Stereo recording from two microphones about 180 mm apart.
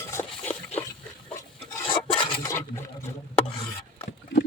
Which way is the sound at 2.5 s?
15° left (ahead or behind).